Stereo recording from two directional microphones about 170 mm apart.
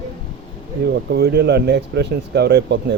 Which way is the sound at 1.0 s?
70° right (ahead or behind).